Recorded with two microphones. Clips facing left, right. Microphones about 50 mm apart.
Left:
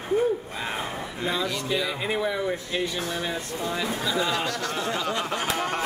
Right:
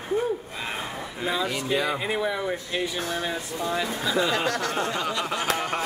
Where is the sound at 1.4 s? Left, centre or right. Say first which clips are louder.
Right 2 dB; right.